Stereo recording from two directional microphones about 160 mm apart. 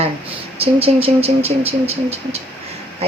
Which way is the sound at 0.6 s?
35° right (ahead or behind).